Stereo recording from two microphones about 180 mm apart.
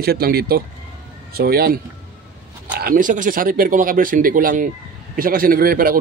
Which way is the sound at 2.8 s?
50° right (ahead or behind).